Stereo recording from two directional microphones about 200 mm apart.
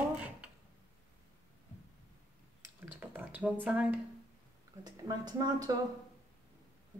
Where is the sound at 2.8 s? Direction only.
10° right (ahead or behind).